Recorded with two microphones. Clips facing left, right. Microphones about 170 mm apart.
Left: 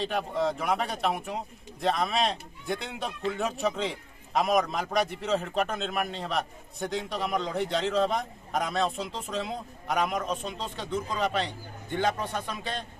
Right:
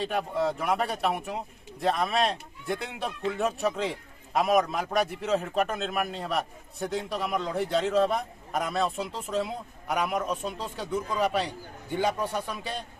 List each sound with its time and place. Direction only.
0.0 s a man's voice: 5° right (ahead or behind)